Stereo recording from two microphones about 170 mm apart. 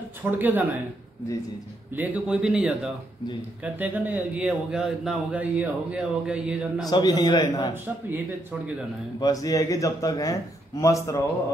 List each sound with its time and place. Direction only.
0.2 s speech: 10° right (ahead or behind)
2.0 s speech: 5° right (ahead or behind)
6.9 s speech: 25° left (ahead or behind)
7.7 s speech: 10° right (ahead or behind)
9.2 s speech: 20° left (ahead or behind)